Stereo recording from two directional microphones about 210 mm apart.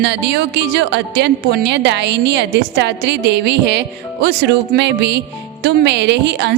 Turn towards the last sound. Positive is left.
turn(degrees=-55)  # may be behind; listen again after turning